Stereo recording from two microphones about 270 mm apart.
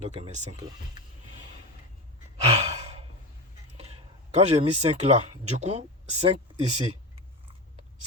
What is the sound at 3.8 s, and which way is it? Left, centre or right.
Speech, right.